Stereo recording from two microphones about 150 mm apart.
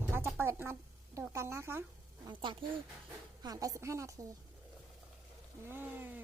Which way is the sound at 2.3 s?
35° right (ahead or behind).